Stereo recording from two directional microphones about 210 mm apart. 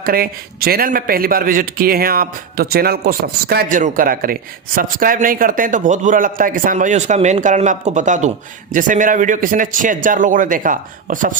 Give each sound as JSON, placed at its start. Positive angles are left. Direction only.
{"t": 0.0, "sound": "a man's voice", "side_deg": -45}